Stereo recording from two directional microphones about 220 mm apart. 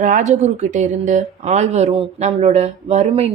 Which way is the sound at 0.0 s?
35° right (ahead or behind).